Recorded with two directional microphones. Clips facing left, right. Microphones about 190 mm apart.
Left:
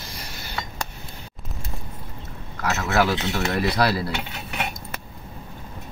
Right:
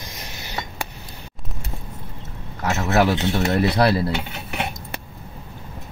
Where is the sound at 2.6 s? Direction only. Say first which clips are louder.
Right 3 dB; 25° right (ahead or behind).